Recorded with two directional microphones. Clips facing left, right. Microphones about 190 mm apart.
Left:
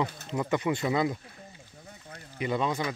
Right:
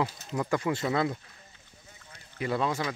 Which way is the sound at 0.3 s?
Centre (ahead or behind).